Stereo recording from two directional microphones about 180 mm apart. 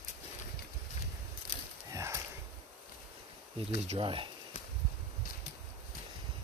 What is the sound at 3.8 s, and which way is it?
Speech, 30° right (ahead or behind).